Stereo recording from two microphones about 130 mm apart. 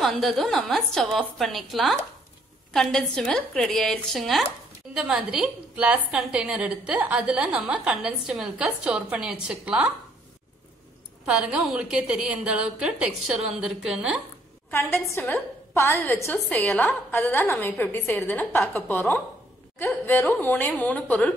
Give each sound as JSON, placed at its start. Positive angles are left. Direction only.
{"t": 0.0, "sound": "a woman's voice", "side_deg": 0}
{"t": 11.2, "sound": "a woman's voice", "side_deg": -5}
{"t": 14.7, "sound": "a woman's voice", "side_deg": 15}